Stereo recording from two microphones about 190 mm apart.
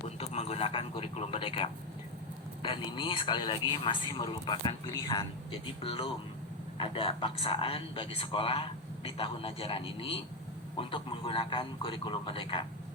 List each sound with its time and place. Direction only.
0.2 s a man's voice: 30° left (ahead or behind)